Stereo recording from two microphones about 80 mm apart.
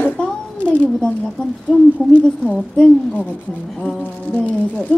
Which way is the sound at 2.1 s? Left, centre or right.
Centre.